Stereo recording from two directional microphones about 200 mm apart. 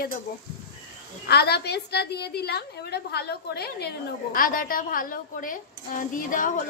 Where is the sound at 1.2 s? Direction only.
55° left (ahead or behind).